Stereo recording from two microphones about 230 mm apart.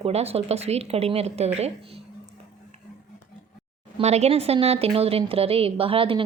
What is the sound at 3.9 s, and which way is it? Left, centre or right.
A woman's voice, right.